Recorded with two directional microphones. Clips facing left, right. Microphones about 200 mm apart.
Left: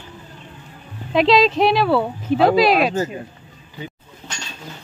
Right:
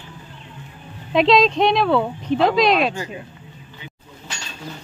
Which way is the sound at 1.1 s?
Centre (ahead or behind).